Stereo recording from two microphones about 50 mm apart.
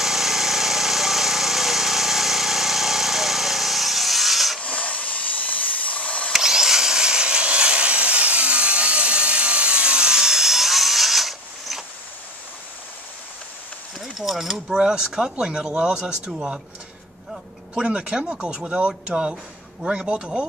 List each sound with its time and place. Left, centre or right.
0.0 s engine: centre
4.6 s a sound: left
6.3 s wood: centre
14.0 s speech: centre
17.3 s a sound: centre
17.9 s speech: right